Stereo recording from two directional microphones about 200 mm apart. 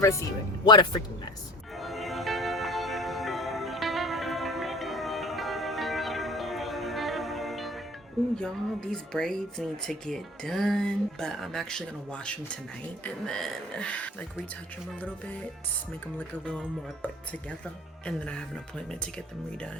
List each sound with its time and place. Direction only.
0.0 s speech: 15° left (ahead or behind)
1.8 s music: centre (ahead or behind)
8.4 s speech: 5° left (ahead or behind)
16.1 s speech: 5° left (ahead or behind)